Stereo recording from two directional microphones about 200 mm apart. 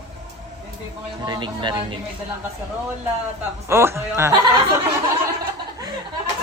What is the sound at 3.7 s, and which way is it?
Speech, 15° right (ahead or behind).